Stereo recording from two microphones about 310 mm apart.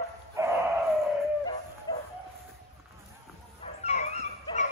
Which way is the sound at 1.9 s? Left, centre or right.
Centre.